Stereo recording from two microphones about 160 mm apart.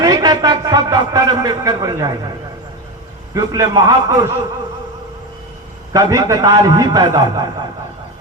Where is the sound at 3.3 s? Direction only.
25° right (ahead or behind).